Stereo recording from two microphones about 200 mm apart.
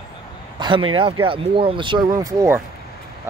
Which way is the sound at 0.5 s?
25° right (ahead or behind).